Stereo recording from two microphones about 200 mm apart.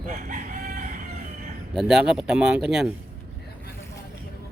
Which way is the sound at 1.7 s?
5° right (ahead or behind).